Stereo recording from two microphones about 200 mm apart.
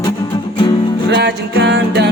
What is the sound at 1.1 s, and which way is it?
Music, 60° right (ahead or behind).